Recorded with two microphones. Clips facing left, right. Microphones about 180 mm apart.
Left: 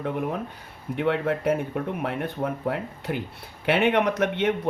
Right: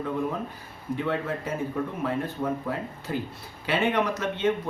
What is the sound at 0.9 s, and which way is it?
Speech, 65° left (ahead or behind).